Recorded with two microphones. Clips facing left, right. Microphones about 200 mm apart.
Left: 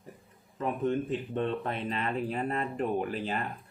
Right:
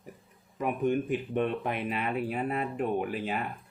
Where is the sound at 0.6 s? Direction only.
15° right (ahead or behind).